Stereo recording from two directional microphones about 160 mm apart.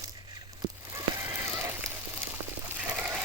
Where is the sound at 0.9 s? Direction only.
20° right (ahead or behind).